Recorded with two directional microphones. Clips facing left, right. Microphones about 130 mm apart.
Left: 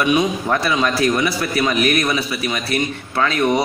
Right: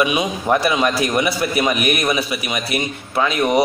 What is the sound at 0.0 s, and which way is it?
A man's voice, 10° right (ahead or behind).